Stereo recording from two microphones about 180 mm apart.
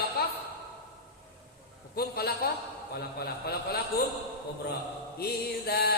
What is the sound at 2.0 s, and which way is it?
Music, 60° left (ahead or behind).